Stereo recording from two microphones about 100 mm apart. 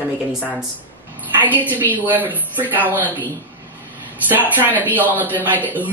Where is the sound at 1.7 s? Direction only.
20° right (ahead or behind).